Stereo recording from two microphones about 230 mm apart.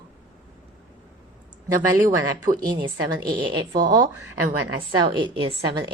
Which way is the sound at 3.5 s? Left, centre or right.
Centre.